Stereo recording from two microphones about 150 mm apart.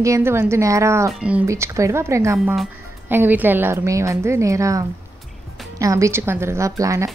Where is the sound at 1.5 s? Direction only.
20° right (ahead or behind).